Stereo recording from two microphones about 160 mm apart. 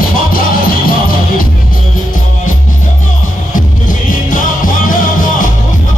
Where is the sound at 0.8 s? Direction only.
65° left (ahead or behind).